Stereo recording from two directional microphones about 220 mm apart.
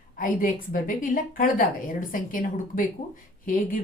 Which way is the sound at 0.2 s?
40° left (ahead or behind).